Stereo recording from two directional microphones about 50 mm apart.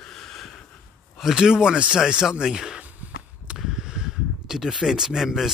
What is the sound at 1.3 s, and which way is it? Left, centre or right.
Speech, centre.